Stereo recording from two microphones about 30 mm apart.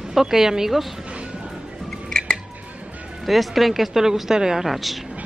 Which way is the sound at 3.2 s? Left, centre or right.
Centre.